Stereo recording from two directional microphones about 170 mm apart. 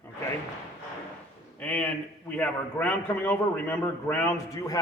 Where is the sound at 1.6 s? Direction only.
5° left (ahead or behind).